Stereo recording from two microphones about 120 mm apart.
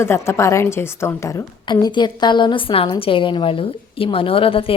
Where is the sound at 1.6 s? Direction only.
40° left (ahead or behind).